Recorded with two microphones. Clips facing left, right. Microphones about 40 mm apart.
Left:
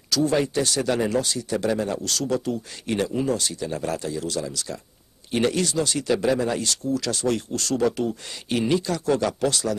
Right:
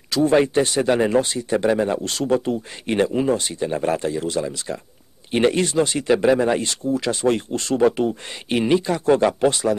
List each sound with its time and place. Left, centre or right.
0.1 s speech: right